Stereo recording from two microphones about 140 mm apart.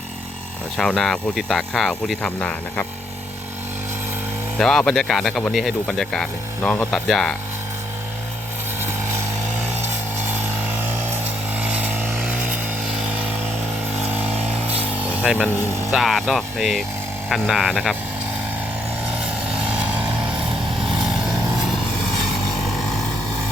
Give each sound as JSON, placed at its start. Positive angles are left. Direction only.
{"t": 0.8, "sound": "speech", "side_deg": 5}
{"t": 4.5, "sound": "speech", "side_deg": 5}
{"t": 8.8, "sound": "a sound", "side_deg": -15}
{"t": 10.3, "sound": "a sound", "side_deg": -15}
{"t": 11.5, "sound": "vehicle", "side_deg": -10}
{"t": 14.1, "sound": "a sound", "side_deg": -15}
{"t": 15.0, "sound": "speech", "side_deg": -10}
{"t": 15.9, "sound": "speech", "side_deg": 0}
{"t": 19.5, "sound": "vehicle", "side_deg": -10}